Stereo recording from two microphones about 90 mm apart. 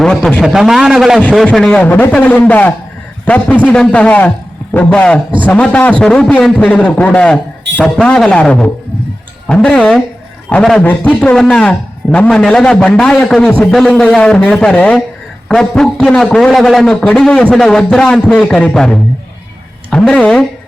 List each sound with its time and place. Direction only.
0.0 s a man's voice: 10° left (ahead or behind)
0.4 s a man's voice: 5° right (ahead or behind)
1.8 s a man's voice: 20° left (ahead or behind)